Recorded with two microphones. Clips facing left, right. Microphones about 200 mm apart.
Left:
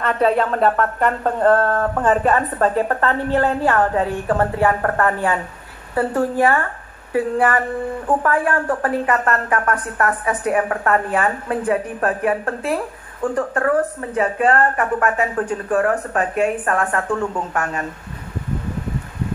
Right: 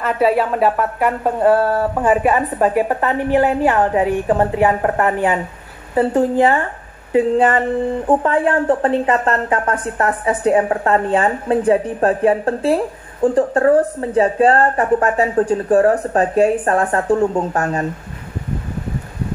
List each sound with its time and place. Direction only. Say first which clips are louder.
0.0 s a woman's voice: right 2 dB; 5° right (ahead or behind); by 17.8 s 30° right (ahead or behind)